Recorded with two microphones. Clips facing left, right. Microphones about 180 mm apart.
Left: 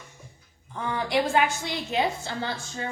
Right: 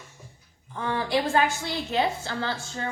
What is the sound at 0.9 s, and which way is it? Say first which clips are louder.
A woman's voice: even; 20° left (ahead or behind).